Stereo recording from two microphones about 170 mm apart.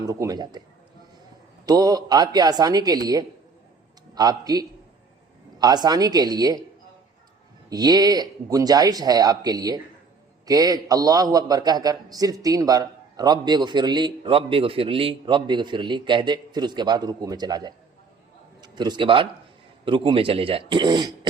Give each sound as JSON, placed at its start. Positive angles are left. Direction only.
{"t": 0.0, "sound": "a man's voice", "side_deg": -20}
{"t": 1.6, "sound": "a man's voice", "side_deg": -25}
{"t": 7.7, "sound": "a man's voice", "side_deg": -25}